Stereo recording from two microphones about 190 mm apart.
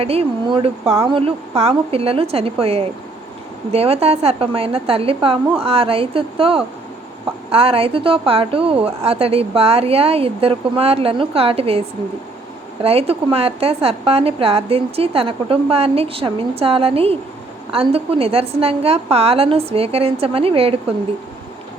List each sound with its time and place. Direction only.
0.0 s a woman's voice: 30° right (ahead or behind)